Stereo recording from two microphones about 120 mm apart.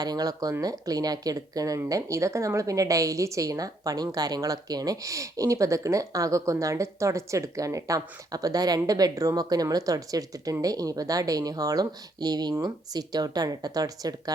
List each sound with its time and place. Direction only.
0.0 s speech: 35° right (ahead or behind)